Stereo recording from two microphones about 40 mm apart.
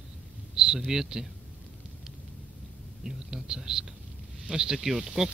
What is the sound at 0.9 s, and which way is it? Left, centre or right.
Speech, centre.